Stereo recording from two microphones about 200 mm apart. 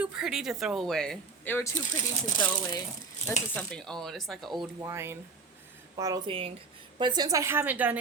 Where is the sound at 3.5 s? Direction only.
5° left (ahead or behind).